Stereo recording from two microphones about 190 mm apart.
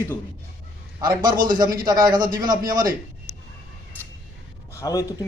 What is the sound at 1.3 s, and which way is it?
Speech, 50° right (ahead or behind).